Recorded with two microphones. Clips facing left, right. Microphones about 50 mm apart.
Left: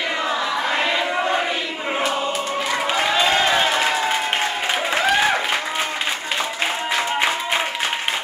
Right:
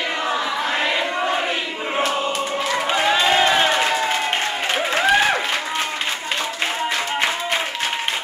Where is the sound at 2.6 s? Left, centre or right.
Centre.